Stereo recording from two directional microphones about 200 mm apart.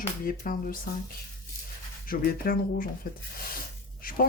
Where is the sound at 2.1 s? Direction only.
45° left (ahead or behind).